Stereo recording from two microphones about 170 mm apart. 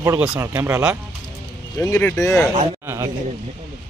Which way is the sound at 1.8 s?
15° left (ahead or behind).